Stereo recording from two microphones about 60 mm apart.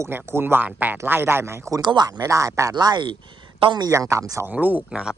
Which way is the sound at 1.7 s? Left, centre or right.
Right.